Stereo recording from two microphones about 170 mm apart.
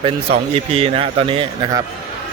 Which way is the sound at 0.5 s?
35° right (ahead or behind).